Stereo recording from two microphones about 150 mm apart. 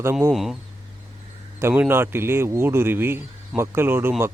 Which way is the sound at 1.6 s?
15° right (ahead or behind).